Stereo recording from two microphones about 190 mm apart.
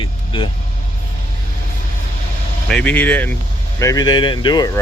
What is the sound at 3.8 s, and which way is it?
Speech, 20° left (ahead or behind).